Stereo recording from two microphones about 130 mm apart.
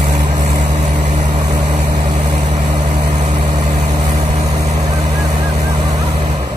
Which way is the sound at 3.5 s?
30° right (ahead or behind).